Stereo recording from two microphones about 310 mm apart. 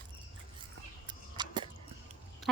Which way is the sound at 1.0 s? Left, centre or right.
Centre.